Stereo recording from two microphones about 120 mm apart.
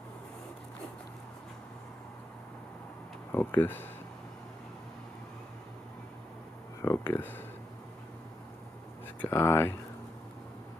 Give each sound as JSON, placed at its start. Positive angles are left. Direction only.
{"t": 3.3, "sound": "speech", "side_deg": 15}
{"t": 6.8, "sound": "a sound", "side_deg": 20}
{"t": 9.2, "sound": "speech", "side_deg": 20}